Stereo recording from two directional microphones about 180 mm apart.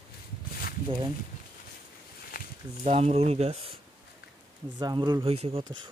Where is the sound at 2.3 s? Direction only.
60° left (ahead or behind).